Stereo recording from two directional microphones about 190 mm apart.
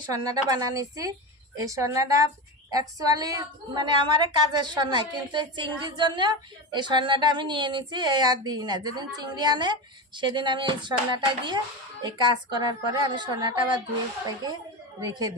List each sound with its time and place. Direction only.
0.1 s a woman's voice: 20° right (ahead or behind)